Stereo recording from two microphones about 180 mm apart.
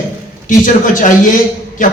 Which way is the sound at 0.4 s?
45° left (ahead or behind).